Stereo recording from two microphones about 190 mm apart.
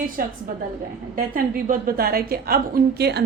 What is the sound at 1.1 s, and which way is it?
A woman's voice, 50° right (ahead or behind).